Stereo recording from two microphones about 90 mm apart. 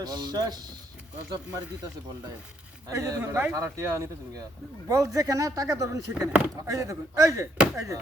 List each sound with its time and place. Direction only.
0.0 s speech: 45° right (ahead or behind)
3.2 s speech: 25° right (ahead or behind)